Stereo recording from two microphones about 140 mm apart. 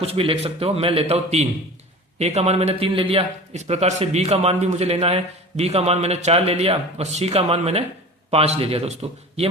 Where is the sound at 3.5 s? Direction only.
50° right (ahead or behind).